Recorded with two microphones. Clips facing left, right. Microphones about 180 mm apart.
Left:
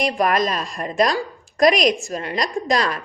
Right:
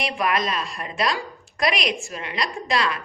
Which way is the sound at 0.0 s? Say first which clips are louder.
Left 5 dB; 45° left (ahead or behind).